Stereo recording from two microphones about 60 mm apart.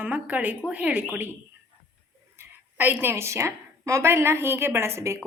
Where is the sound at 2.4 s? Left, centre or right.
Right.